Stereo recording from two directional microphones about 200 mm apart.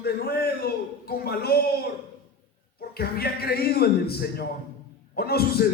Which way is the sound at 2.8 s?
50° left (ahead or behind).